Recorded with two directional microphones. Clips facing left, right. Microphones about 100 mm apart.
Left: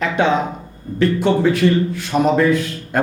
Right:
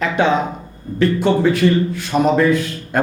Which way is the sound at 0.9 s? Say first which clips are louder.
Even; 15° right (ahead or behind).